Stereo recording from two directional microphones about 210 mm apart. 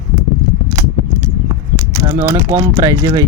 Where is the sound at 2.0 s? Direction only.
15° right (ahead or behind).